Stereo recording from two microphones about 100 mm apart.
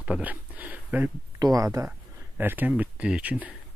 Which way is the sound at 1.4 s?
35° right (ahead or behind).